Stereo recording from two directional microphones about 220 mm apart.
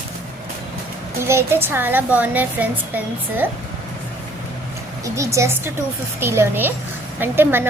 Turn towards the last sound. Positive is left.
turn(degrees=-10)  # may be behind; listen again after turning